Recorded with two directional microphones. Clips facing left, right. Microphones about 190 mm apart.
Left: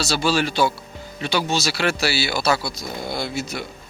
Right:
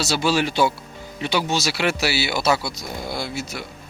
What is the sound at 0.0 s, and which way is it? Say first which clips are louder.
Speech: even; 20° right (ahead or behind).